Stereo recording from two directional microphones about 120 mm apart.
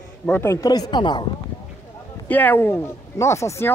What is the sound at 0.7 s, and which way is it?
Speech, 35° left (ahead or behind).